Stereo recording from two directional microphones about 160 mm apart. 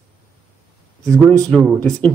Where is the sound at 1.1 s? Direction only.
20° right (ahead or behind).